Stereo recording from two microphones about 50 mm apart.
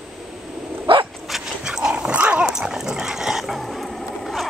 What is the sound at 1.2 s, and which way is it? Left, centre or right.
Dog, centre.